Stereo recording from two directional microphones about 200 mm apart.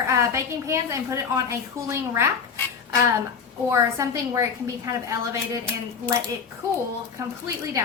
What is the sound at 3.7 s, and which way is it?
A woman's voice, 15° right (ahead or behind).